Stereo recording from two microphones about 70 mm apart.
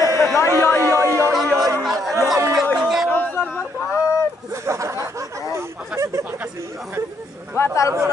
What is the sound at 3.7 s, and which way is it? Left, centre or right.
Speech, left.